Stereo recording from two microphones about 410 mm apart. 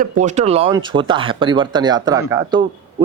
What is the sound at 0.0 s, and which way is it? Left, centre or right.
Speech, centre.